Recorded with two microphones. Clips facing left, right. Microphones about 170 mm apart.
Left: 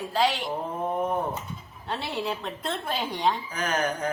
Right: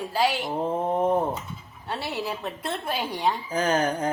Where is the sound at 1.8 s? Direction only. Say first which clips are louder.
Even; 5° right (ahead or behind).